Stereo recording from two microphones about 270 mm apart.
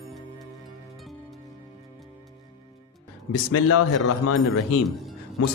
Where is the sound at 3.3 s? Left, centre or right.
Left.